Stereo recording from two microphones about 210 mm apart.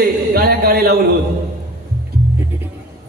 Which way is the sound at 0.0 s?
45° right (ahead or behind).